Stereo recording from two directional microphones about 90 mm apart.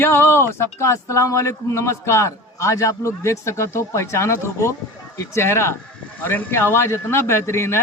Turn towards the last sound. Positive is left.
turn(degrees=30)  # may be behind; listen again after turning